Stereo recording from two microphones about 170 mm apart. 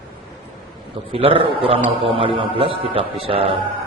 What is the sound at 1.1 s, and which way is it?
A man's voice, 30° right (ahead or behind).